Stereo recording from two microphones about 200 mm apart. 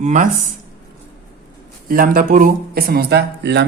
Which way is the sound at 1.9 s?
45° right (ahead or behind).